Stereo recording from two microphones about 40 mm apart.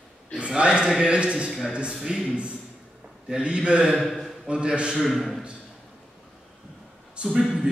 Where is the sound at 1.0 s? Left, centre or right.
Right.